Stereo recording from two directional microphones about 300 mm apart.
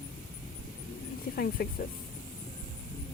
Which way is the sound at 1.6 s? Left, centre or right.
Left.